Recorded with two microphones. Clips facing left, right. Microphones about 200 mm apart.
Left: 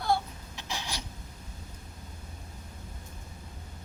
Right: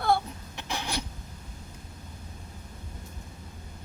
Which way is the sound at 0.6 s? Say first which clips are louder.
Right 5 dB; 60° right (ahead or behind).